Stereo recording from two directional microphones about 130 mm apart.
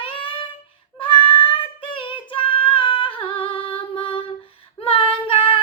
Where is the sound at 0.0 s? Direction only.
45° left (ahead or behind).